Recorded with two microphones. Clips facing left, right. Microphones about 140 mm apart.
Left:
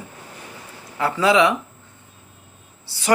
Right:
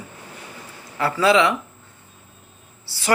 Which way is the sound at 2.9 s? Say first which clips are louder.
Left 1 dB; 20° left (ahead or behind).